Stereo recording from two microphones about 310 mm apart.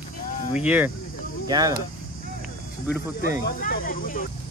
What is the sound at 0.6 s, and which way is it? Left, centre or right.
Speech, centre.